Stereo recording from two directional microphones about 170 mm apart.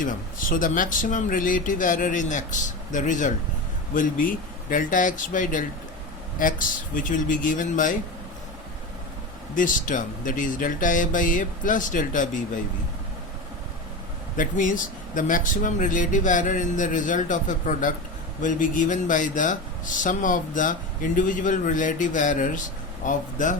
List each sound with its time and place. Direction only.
0.0 s a man's voice: 50° left (ahead or behind)
9.6 s a man's voice: 50° left (ahead or behind)
14.3 s a man's voice: 50° left (ahead or behind)